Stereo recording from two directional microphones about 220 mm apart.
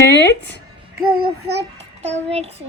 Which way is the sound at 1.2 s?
50° right (ahead or behind).